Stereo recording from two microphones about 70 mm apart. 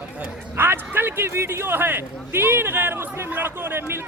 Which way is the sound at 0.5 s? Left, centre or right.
Right.